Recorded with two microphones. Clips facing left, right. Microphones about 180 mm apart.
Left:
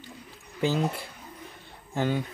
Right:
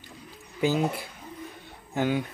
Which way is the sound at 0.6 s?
5° right (ahead or behind).